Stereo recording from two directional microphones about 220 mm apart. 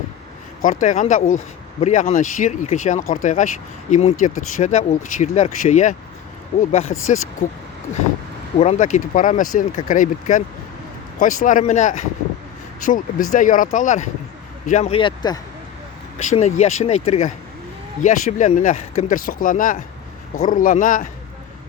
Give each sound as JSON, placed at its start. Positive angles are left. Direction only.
{"t": 0.6, "sound": "speech", "side_deg": 35}
{"t": 16.1, "sound": "speech", "side_deg": 30}